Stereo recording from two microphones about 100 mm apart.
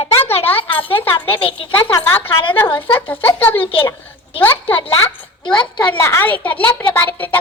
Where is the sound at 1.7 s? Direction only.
20° left (ahead or behind).